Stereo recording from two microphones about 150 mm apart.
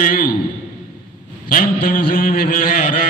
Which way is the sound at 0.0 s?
65° left (ahead or behind).